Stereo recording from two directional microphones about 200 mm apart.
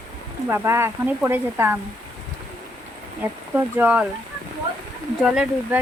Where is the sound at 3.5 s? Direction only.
10° right (ahead or behind).